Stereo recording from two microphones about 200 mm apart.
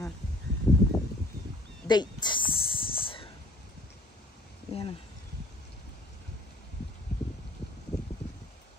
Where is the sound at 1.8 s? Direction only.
20° left (ahead or behind).